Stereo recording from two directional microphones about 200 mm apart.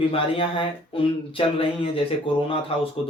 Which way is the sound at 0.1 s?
25° left (ahead or behind).